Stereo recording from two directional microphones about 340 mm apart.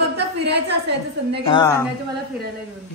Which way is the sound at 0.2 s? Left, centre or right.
Right.